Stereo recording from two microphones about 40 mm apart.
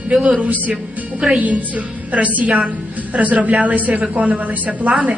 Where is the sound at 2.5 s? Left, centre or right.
Right.